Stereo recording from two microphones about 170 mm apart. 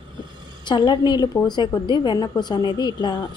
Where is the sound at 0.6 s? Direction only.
25° left (ahead or behind).